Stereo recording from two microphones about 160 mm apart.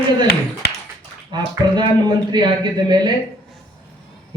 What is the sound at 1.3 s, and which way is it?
A man's voice, 25° right (ahead or behind).